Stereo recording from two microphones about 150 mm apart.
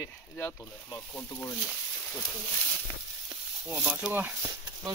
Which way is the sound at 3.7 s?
10° right (ahead or behind).